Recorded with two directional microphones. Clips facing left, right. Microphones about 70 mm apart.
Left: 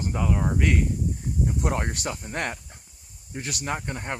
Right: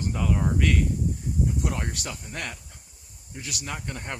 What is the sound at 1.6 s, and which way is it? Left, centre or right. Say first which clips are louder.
Speech: left 4 dB; left.